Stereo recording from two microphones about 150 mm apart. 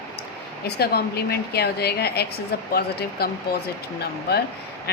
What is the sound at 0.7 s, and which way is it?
A woman's voice, 90° left.